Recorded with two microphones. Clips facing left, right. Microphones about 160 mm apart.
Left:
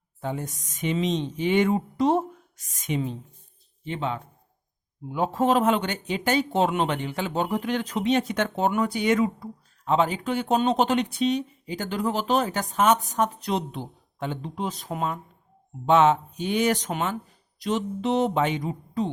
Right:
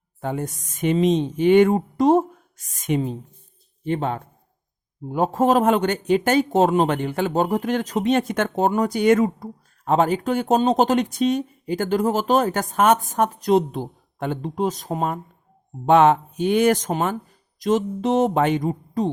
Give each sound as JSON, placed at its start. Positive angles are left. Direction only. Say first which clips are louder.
{"t": 0.2, "sound": "speech", "louder": "right 4 dB", "side_deg": -55}
{"t": 15.9, "sound": "speech", "louder": "right 4 dB", "side_deg": -55}